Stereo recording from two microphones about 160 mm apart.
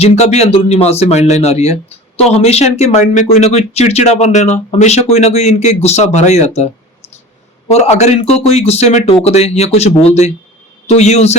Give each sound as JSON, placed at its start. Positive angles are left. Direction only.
{"t": 0.0, "sound": "speech", "side_deg": 40}
{"t": 7.7, "sound": "speech", "side_deg": 45}